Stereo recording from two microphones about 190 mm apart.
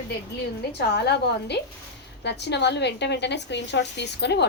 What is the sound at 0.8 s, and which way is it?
A woman's voice, 60° left (ahead or behind).